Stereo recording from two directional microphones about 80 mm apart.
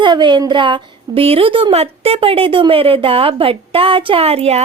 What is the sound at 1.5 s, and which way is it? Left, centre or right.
Speech, right.